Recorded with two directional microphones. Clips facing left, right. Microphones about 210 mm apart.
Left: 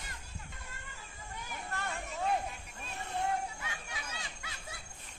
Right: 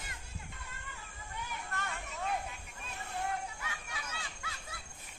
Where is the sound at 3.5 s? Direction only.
25° left (ahead or behind).